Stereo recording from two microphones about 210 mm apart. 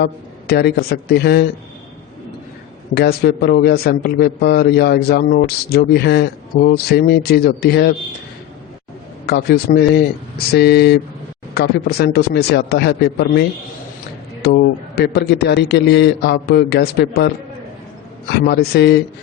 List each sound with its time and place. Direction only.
0.0 s a man's voice: 50° left (ahead or behind)
2.9 s a man's voice: 50° left (ahead or behind)
9.2 s a man's voice: 50° left (ahead or behind)
14.4 s a man's voice: 50° left (ahead or behind)